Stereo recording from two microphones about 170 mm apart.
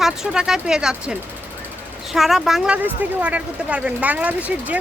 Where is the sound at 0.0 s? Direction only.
5° right (ahead or behind).